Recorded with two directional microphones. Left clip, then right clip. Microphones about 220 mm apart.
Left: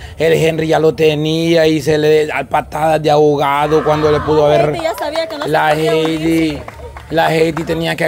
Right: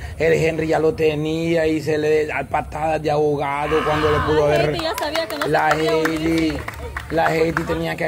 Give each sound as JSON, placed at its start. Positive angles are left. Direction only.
{"t": 0.2, "sound": "a man's voice", "side_deg": 25}
{"t": 5.0, "sound": "speech", "side_deg": 40}
{"t": 5.5, "sound": "a man's voice", "side_deg": 25}